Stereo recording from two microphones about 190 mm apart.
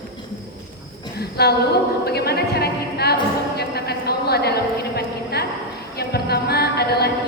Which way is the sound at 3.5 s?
55° left (ahead or behind).